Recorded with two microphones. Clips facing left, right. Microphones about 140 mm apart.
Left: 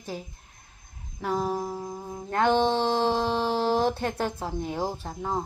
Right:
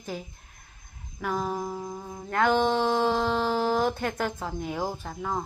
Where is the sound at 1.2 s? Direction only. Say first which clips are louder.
Left 2 dB; 30° left (ahead or behind).